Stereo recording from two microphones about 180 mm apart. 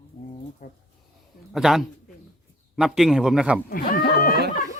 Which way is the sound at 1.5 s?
Centre (ahead or behind).